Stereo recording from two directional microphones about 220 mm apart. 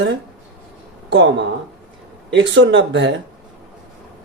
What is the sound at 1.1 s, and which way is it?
Speech, 55° right (ahead or behind).